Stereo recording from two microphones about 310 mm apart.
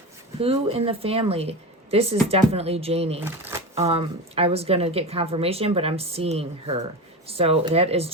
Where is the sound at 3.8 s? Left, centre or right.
Centre.